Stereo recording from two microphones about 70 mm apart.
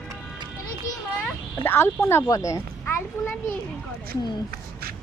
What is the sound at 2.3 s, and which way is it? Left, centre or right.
Speech, left.